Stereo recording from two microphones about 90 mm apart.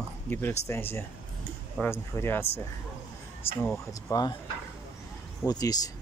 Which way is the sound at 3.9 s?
40° left (ahead or behind).